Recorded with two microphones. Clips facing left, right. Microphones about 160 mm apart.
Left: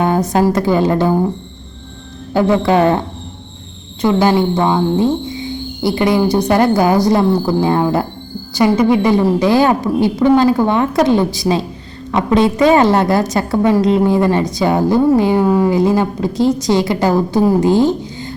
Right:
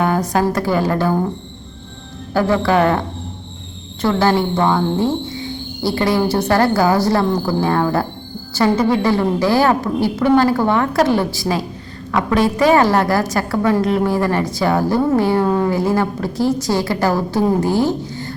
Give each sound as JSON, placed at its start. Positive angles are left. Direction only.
{"t": 0.0, "sound": "music", "side_deg": 20}
{"t": 0.5, "sound": "a woman's voice", "side_deg": 20}
{"t": 2.3, "sound": "a woman's voice", "side_deg": 20}
{"t": 4.0, "sound": "a woman's voice", "side_deg": 15}